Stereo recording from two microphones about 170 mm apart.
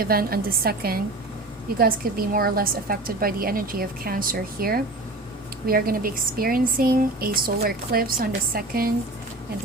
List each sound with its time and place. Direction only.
0.0 s speech: 60° right (ahead or behind)